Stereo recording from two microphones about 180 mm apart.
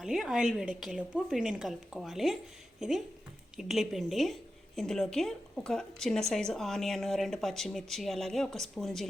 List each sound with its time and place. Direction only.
0.0 s speech: centre (ahead or behind)
3.6 s speech: centre (ahead or behind)